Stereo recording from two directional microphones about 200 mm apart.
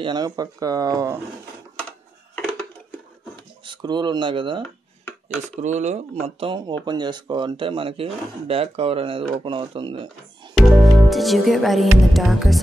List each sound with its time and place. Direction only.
0.0 s speech: 20° right (ahead or behind)
3.6 s speech: 20° right (ahead or behind)
5.6 s speech: 35° right (ahead or behind)
10.5 s music: centre (ahead or behind)